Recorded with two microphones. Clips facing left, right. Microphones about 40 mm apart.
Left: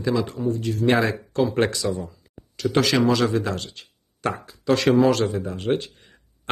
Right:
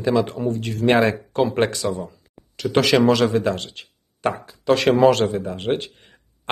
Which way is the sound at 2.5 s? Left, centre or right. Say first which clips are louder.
Right 3 dB; right.